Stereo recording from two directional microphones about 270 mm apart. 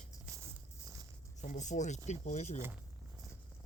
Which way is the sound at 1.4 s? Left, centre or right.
Left.